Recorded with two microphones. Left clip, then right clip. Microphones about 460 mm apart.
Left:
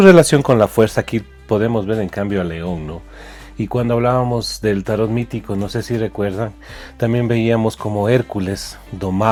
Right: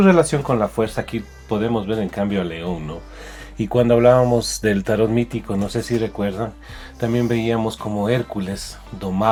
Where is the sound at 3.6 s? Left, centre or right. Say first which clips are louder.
Right 3 dB; left.